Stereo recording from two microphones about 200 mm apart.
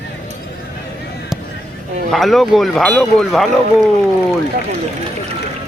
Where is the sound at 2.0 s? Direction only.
Centre (ahead or behind).